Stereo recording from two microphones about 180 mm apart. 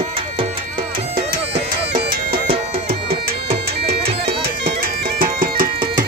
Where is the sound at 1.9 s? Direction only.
55° right (ahead or behind).